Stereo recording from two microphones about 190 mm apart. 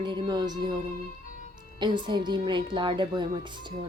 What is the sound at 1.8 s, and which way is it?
Speech, 25° right (ahead or behind).